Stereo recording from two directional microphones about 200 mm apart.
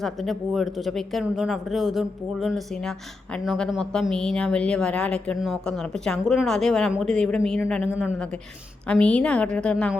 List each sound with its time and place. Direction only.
0.0 s speech: centre (ahead or behind)
8.9 s speech: 5° left (ahead or behind)